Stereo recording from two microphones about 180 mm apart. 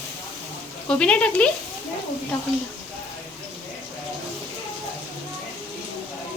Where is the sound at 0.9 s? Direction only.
5° left (ahead or behind).